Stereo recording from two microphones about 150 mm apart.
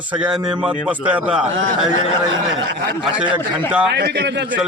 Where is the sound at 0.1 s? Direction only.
5° right (ahead or behind).